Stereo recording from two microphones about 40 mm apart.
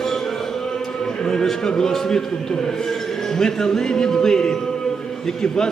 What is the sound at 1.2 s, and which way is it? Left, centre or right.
A man's voice, centre.